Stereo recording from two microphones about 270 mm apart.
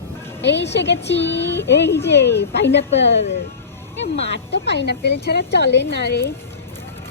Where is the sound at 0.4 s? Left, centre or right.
Left.